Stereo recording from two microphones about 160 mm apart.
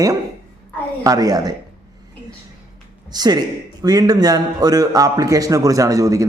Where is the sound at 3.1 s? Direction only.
25° right (ahead or behind).